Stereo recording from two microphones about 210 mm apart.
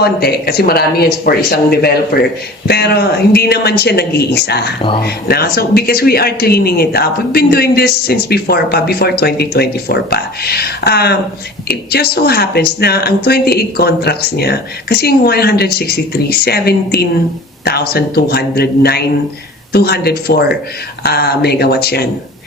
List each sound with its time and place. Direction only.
0.0 s a woman's voice: 50° left (ahead or behind)